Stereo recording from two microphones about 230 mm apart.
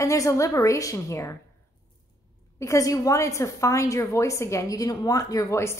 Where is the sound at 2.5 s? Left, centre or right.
Centre.